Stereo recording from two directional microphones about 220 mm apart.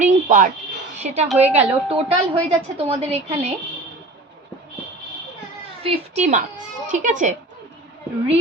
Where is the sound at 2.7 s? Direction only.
30° right (ahead or behind).